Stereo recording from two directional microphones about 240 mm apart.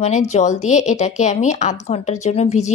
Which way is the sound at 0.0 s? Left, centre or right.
Left.